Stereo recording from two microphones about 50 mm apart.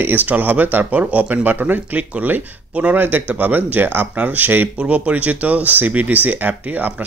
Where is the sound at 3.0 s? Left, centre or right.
Right.